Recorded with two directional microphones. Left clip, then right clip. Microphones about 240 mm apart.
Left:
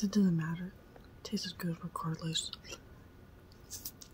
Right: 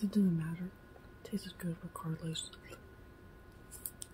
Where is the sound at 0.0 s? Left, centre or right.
Centre.